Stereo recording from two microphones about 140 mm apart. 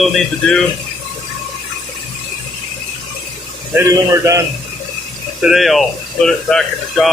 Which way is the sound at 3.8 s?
25° right (ahead or behind).